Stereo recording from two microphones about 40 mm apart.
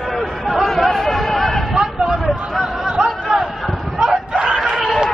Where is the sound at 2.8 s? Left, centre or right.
Right.